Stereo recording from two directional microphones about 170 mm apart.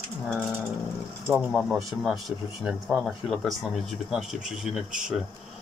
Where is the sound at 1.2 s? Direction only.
5° right (ahead or behind).